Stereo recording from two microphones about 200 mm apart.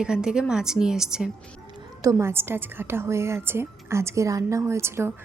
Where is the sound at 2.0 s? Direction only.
15° right (ahead or behind).